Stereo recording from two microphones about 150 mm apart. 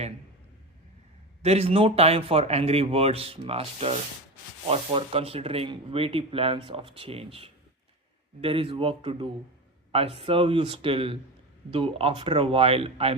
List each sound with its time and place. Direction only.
1.4 s speech: 40° right (ahead or behind)